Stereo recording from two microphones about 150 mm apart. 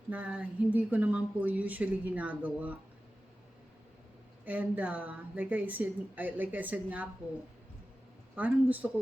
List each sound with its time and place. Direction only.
0.1 s speech: 10° right (ahead or behind)
4.4 s speech: 10° right (ahead or behind)
8.4 s speech: 10° right (ahead or behind)